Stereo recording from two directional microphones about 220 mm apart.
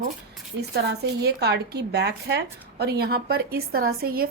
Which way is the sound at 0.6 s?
50° right (ahead or behind).